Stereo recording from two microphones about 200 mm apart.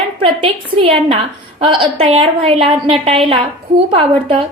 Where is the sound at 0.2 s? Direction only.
25° right (ahead or behind).